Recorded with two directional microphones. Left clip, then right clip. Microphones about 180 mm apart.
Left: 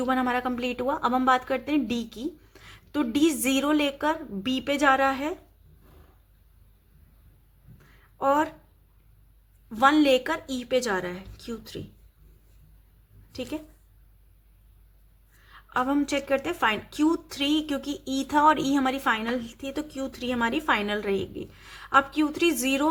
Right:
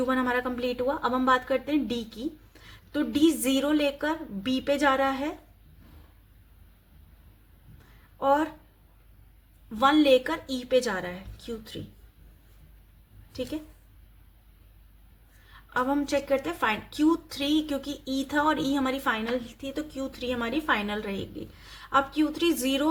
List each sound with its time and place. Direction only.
0.0 s a woman's voice: 25° left (ahead or behind)
8.2 s a woman's voice: 30° left (ahead or behind)
9.6 s a woman's voice: 30° left (ahead or behind)
15.7 s a woman's voice: 30° left (ahead or behind)